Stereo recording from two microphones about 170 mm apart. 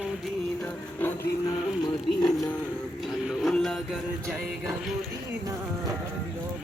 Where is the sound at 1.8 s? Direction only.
25° left (ahead or behind).